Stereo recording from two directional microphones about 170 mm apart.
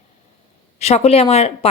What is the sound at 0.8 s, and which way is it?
Speech, 40° left (ahead or behind).